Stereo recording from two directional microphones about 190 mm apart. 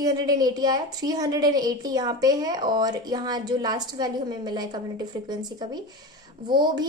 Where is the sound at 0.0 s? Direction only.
20° right (ahead or behind).